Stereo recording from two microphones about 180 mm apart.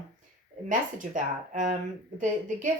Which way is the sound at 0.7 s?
45° right (ahead or behind).